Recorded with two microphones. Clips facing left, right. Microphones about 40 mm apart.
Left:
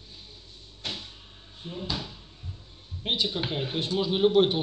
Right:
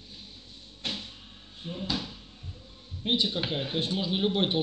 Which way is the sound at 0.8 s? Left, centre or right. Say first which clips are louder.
Right 1 dB; right.